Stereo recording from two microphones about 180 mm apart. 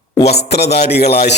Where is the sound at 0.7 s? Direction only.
60° left (ahead or behind).